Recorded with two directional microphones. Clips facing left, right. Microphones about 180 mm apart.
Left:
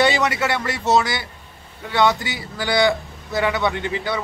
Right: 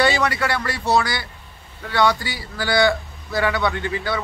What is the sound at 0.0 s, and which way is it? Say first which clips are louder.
Speech: left 1 dB; 20° left (ahead or behind).